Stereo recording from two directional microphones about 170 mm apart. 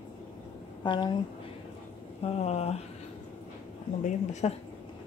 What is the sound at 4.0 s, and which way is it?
Speech, 40° left (ahead or behind).